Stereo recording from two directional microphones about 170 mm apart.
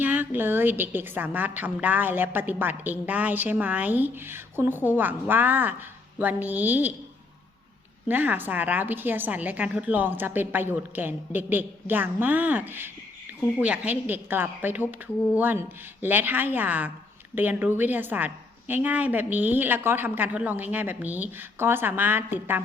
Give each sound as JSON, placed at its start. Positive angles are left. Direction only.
{"t": 0.0, "sound": "a woman's voice", "side_deg": -10}
{"t": 8.0, "sound": "a woman's voice", "side_deg": -10}